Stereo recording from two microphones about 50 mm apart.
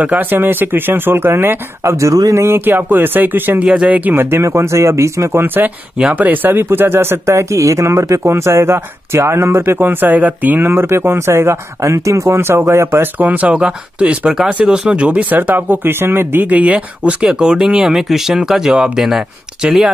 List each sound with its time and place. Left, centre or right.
0.3 s speech: right
1.9 s speech: right
2.6 s speech: right
3.5 s speech: centre
3.9 s speech: right
4.2 s speech: right
6.1 s speech: right
9.6 s speech: right
10.7 s speech: right
12.6 s speech: right
13.0 s speech: right
15.3 s speech: right
16.4 s speech: right; by 19.9 s centre